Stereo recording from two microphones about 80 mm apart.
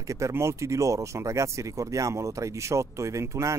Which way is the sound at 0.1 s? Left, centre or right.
Right.